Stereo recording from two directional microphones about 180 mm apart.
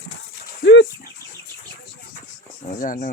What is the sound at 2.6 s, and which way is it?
Speech, 45° left (ahead or behind).